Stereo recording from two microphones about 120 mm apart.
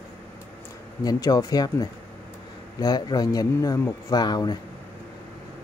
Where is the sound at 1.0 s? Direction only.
30° left (ahead or behind).